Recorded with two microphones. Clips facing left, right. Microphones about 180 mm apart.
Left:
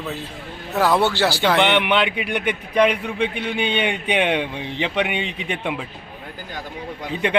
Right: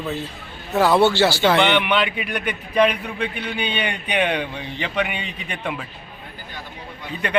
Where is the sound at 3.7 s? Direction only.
85° left.